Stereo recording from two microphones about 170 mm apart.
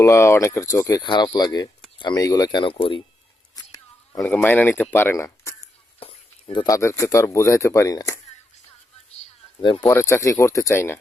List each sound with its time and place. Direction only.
0.0 s speech: 15° left (ahead or behind)
3.5 s a sound: 20° left (ahead or behind)
4.3 s speech: 10° left (ahead or behind)
6.0 s speech: 30° left (ahead or behind)
9.1 s a sound: 30° left (ahead or behind)
9.8 s speech: 15° left (ahead or behind)